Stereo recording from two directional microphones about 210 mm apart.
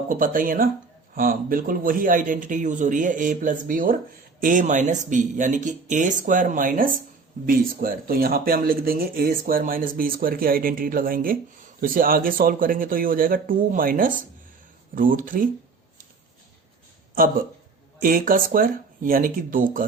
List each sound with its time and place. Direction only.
0.1 s a man's voice: 40° right (ahead or behind)
17.2 s a man's voice: 40° right (ahead or behind)